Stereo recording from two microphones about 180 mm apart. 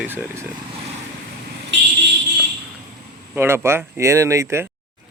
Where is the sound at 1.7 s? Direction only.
80° right.